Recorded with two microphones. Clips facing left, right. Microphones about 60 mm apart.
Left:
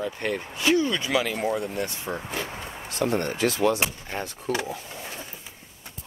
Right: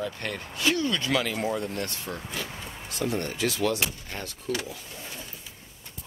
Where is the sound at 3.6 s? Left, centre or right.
Left.